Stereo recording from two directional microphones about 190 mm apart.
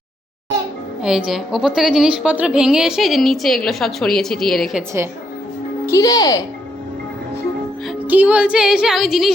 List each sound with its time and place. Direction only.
1.0 s a woman's voice: centre (ahead or behind)
5.8 s speech: 15° left (ahead or behind)
8.0 s a woman's voice: 10° right (ahead or behind)